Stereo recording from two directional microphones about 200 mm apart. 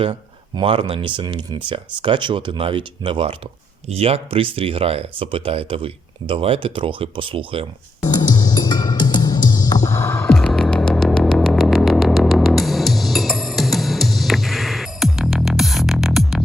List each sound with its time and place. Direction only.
0.0 s speech: 25° right (ahead or behind)
8.3 s music: 20° left (ahead or behind)
10.3 s vehicle: 5° left (ahead or behind)